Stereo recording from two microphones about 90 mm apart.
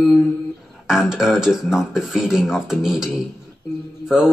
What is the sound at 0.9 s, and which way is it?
Speech, 5° right (ahead or behind).